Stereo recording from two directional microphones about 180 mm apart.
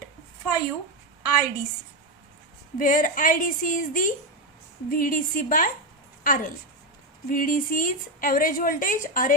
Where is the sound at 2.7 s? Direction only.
50° left (ahead or behind).